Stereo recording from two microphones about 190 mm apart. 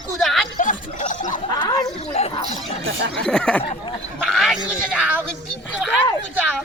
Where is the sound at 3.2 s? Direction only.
5° left (ahead or behind).